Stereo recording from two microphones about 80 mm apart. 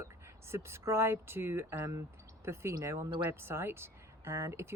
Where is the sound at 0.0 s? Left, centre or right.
Right.